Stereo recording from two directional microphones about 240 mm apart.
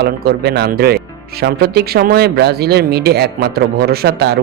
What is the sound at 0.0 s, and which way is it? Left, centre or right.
Speech, right.